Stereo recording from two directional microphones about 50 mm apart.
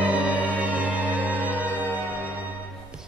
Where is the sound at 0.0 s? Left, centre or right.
Right.